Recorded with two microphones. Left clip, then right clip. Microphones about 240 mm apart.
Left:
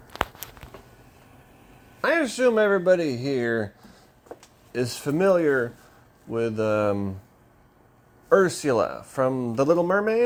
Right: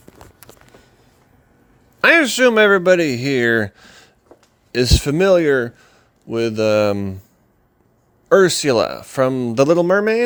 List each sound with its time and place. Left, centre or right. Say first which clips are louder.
2.0 s speech: right 10 dB; right
5.4 s speech: right 6 dB; right
6.6 s speech: right 8 dB; right
8.4 s speech: right 7 dB; right
9.2 s speech: right 6 dB; right
9.5 s speech: right 8 dB; right